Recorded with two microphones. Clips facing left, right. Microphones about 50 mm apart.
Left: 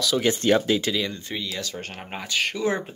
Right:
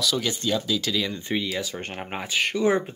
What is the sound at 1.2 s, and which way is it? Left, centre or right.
Speech, right.